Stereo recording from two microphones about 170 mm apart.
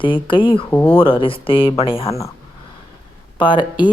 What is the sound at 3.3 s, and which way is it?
Speech, 30° left (ahead or behind).